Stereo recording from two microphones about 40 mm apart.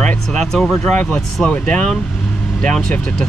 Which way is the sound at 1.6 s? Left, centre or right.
Left.